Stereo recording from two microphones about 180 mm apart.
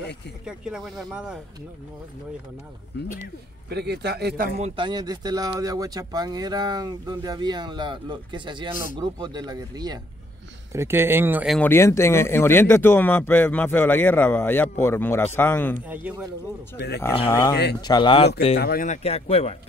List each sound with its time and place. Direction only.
0.5 s speech: 5° right (ahead or behind)
3.6 s a man's voice: 65° right (ahead or behind)
4.6 s speech: 30° right (ahead or behind); by 11.5 s 10° right (ahead or behind)
11.5 s speech: 10° left (ahead or behind)
15.9 s speech: 10° right (ahead or behind)
17.3 s speech: 15° left (ahead or behind)
18.6 s speech: 60° left (ahead or behind)
18.9 s speech: 35° left (ahead or behind)